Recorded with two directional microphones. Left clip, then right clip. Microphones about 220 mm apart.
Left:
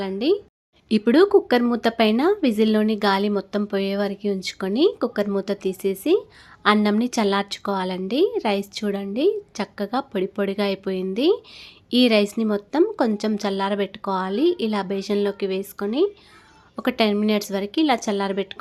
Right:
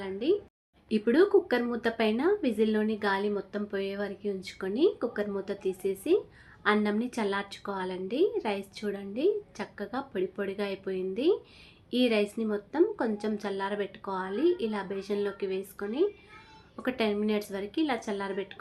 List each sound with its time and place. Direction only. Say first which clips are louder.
0.0 s a woman's voice: left 7 dB; 50° left (ahead or behind)